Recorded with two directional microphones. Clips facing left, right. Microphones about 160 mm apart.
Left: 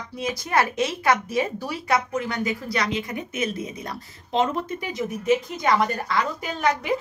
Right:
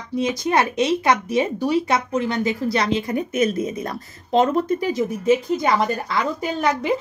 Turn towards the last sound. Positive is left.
turn(degrees=-30)  # may be behind; listen again after turning